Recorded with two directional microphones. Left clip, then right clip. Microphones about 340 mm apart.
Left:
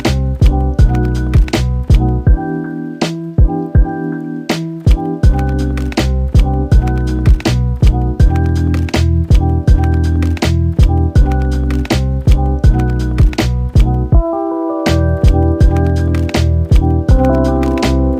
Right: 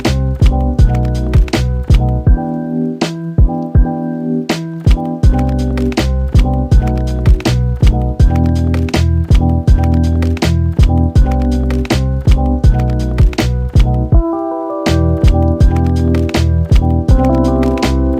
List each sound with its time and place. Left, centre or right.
6.3 s music: right
8.2 s music: right
14.3 s music: centre
15.4 s music: right
16.1 s music: centre
17.0 s music: right